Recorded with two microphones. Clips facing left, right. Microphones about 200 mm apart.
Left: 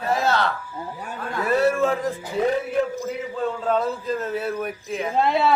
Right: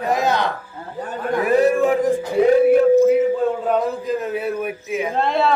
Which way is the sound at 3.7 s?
15° right (ahead or behind).